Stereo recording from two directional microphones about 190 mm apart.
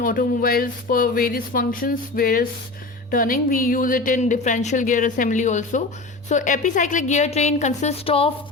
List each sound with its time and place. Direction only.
0.0 s a woman's voice: 50° left (ahead or behind); by 8.3 s 30° left (ahead or behind)